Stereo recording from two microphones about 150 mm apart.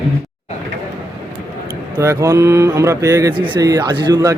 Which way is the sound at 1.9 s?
20° right (ahead or behind).